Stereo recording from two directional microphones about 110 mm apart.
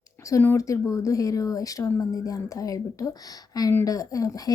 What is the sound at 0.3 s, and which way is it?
Speech, 25° left (ahead or behind).